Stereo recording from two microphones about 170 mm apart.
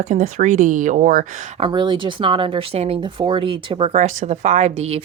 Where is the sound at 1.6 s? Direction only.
25° right (ahead or behind).